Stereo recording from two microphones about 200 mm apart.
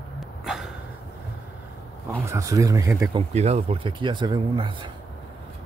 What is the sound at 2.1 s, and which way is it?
Speech, 15° right (ahead or behind).